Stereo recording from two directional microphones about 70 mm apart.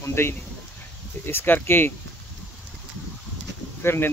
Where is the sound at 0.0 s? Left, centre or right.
Left.